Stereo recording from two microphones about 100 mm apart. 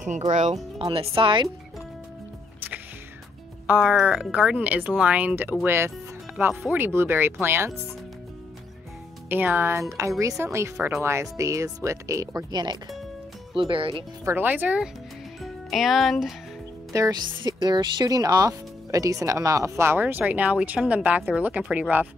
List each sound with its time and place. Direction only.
0.9 s speech: 65° right (ahead or behind)
3.8 s speech: 5° right (ahead or behind); by 7.9 s 25° right (ahead or behind)
9.3 s speech: 20° right (ahead or behind); by 12.7 s 45° right (ahead or behind)
13.6 s speech: 60° right (ahead or behind)
14.2 s speech: 20° right (ahead or behind)
15.4 s speech: centre (ahead or behind)
16.9 s speech: 35° right (ahead or behind)
17.4 s speech: 50° right (ahead or behind); by 22.0 s 15° right (ahead or behind)